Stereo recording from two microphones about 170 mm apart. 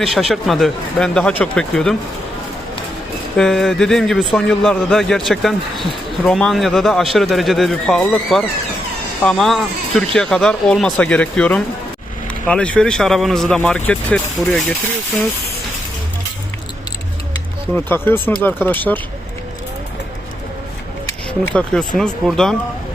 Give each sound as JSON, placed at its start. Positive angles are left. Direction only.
{"t": 0.0, "sound": "a man's voice", "side_deg": 0}
{"t": 3.3, "sound": "a man's voice", "side_deg": 0}
{"t": 17.7, "sound": "speech", "side_deg": 10}
{"t": 21.2, "sound": "a man's voice", "side_deg": 5}